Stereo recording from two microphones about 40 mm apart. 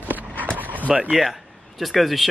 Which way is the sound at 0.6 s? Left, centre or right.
Right.